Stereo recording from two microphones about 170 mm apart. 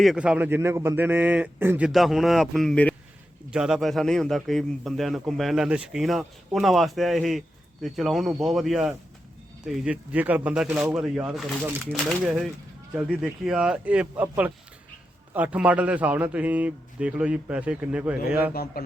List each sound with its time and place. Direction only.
0.0 s a man's voice: 5° right (ahead or behind)
1.9 s a man's voice: centre (ahead or behind)
18.5 s speech: 60° left (ahead or behind)